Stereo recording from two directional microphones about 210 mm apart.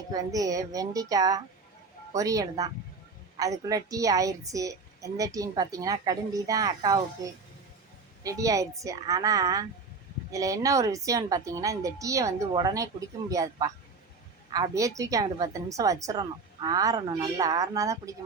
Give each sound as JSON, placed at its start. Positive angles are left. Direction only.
{"t": 0.1, "sound": "a woman's voice", "side_deg": -15}
{"t": 8.2, "sound": "a woman's voice", "side_deg": -15}